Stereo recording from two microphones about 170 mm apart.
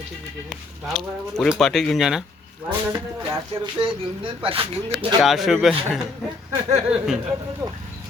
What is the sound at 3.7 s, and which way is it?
Speech, 30° right (ahead or behind).